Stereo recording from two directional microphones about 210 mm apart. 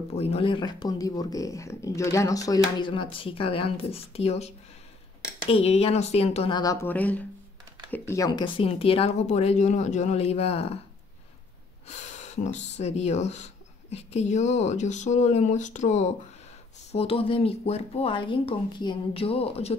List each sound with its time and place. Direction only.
0.1 s speech: 30° left (ahead or behind)
5.5 s speech: 30° left (ahead or behind); by 7.2 s 5° left (ahead or behind)
8.1 s speech: 20° left (ahead or behind)
11.9 s speech: 35° left (ahead or behind)